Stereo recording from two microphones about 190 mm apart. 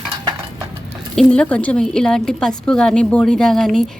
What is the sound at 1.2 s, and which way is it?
A woman's voice, 5° left (ahead or behind).